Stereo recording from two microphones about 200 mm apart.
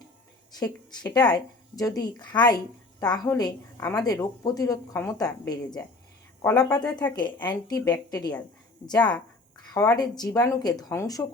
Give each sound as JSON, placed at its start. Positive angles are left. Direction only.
{"t": 0.6, "sound": "a woman's voice", "side_deg": 20}
{"t": 6.4, "sound": "a woman's voice", "side_deg": 5}
{"t": 7.5, "sound": "speech", "side_deg": 20}